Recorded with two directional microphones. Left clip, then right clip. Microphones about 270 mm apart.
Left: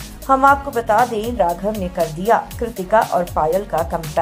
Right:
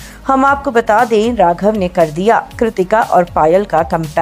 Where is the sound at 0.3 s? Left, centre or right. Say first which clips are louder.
Right 2 dB; right.